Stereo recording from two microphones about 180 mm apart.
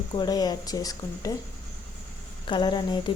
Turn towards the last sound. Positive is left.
turn(degrees=25)  # may be behind; listen again after turning